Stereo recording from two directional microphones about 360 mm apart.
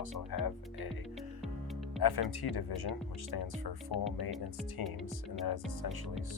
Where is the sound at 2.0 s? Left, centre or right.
Left.